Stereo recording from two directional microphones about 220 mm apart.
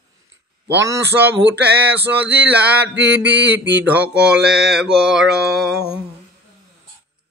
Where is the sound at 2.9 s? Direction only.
50° right (ahead or behind).